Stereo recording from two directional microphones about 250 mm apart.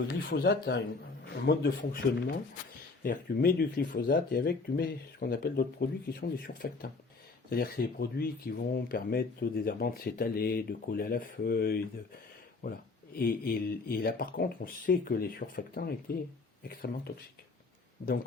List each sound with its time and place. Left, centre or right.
0.1 s speech: left
13.1 s speech: left